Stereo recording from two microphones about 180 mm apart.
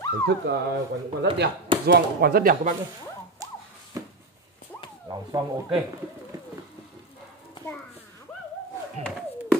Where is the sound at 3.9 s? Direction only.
20° right (ahead or behind).